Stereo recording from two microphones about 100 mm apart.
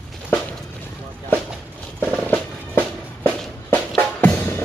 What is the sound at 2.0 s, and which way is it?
Music, 15° left (ahead or behind).